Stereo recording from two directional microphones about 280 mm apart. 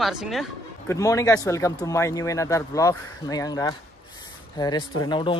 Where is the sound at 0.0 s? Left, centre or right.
Centre.